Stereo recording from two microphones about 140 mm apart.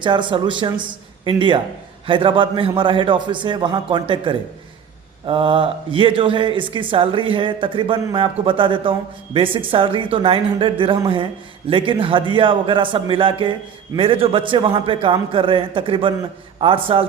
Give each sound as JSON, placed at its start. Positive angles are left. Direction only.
{"t": 0.0, "sound": "speech", "side_deg": -35}